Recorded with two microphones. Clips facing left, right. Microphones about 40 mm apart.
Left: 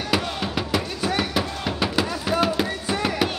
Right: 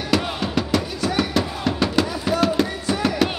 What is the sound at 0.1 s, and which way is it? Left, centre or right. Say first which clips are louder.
Music: right 4 dB; centre.